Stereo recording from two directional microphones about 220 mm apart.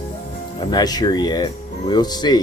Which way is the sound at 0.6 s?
20° left (ahead or behind).